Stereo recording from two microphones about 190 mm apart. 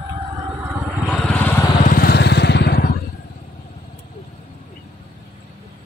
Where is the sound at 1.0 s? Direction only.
5° left (ahead or behind).